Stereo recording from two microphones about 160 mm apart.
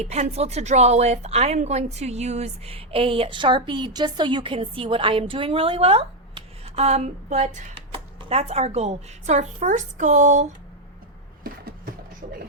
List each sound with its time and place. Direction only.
0.0 s a woman's voice: 40° right (ahead or behind)
7.8 s speech: 35° right (ahead or behind)
11.4 s a sound: 65° right (ahead or behind)